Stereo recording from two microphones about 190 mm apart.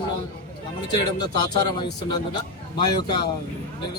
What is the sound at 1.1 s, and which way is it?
Speech, 25° left (ahead or behind).